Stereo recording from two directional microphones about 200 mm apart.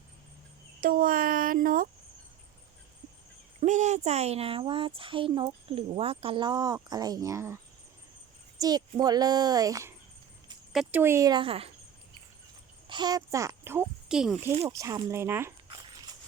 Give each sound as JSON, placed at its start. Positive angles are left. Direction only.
{"t": 0.8, "sound": "a sound", "side_deg": -45}
{"t": 3.6, "sound": "a woman's voice", "side_deg": -35}
{"t": 8.6, "sound": "a woman's voice", "side_deg": -20}
{"t": 10.7, "sound": "speech", "side_deg": 0}
{"t": 11.0, "sound": "a woman's voice", "side_deg": -15}
{"t": 12.9, "sound": "a child's voice", "side_deg": -20}
{"t": 14.7, "sound": "speech", "side_deg": -15}